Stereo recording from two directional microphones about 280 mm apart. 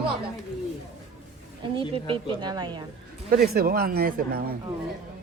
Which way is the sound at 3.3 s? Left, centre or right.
Right.